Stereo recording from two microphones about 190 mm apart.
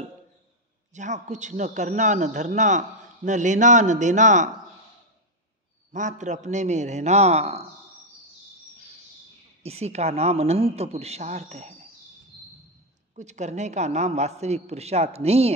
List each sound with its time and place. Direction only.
0.9 s a woman's voice: 40° right (ahead or behind)
5.9 s a woman's voice: 40° right (ahead or behind)
9.6 s a woman's voice: 35° right (ahead or behind)
13.1 s a woman's voice: 40° right (ahead or behind)